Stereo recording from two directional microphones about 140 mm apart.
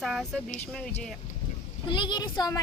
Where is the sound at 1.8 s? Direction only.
35° left (ahead or behind).